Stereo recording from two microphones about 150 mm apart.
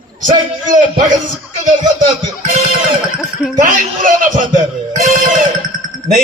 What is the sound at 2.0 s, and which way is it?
Music, 45° right (ahead or behind).